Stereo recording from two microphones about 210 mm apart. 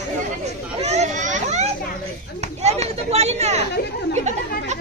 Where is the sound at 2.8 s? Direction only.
30° right (ahead or behind).